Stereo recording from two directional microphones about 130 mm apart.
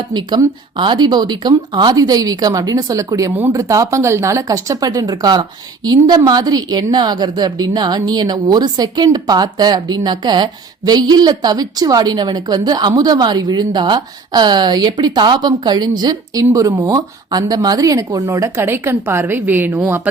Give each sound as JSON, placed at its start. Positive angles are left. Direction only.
{"t": 0.1, "sound": "speech", "side_deg": -35}